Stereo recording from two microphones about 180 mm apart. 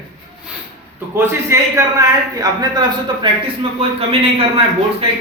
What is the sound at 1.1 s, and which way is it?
A man's voice, 15° right (ahead or behind).